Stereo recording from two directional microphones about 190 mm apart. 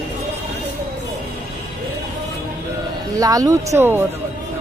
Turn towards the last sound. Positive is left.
turn(degrees=-15)  # may be behind; listen again after turning